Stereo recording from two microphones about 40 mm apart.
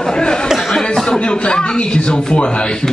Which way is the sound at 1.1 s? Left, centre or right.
Left.